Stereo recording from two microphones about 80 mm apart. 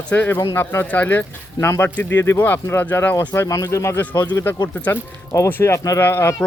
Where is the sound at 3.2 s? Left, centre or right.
Left.